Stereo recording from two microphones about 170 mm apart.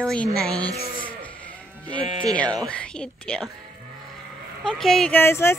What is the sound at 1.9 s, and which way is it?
Speech, 25° right (ahead or behind).